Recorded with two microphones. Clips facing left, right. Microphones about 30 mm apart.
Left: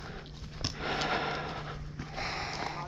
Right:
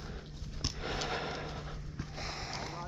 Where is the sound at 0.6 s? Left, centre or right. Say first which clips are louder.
Left 4 dB; left.